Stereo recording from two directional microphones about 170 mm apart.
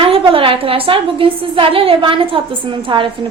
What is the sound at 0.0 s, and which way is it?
A woman's voice, 30° right (ahead or behind).